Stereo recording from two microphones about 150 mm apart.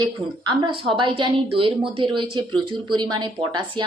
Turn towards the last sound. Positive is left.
turn(degrees=-30)  # may be behind; listen again after turning